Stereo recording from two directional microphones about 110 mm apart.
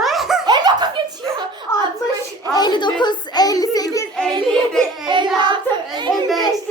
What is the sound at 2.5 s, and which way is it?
Speech, 40° left (ahead or behind).